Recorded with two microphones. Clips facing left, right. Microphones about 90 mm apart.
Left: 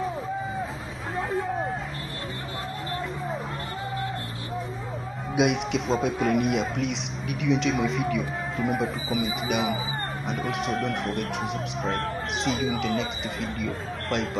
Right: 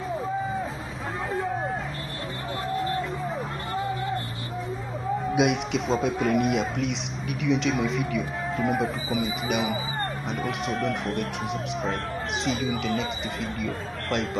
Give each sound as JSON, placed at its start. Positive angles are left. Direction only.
{"t": 5.3, "sound": "speech", "side_deg": 0}
{"t": 12.4, "sound": "speech", "side_deg": 0}